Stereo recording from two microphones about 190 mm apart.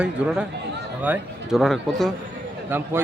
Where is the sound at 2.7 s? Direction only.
10° right (ahead or behind).